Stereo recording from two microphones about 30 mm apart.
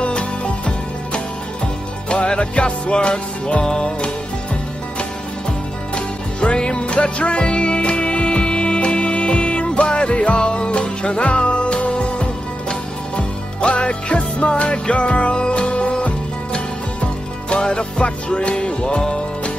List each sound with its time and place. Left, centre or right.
0.0 s music: left
2.2 s music: left
5.9 s music: left
17.0 s music: left